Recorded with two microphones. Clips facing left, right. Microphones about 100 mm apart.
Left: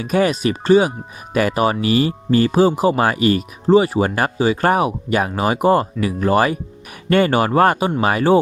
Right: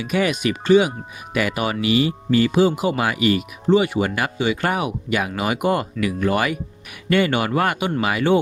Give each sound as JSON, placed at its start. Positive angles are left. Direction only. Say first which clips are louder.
{"t": 0.0, "sound": "speech", "louder": "left 4 dB", "side_deg": 40}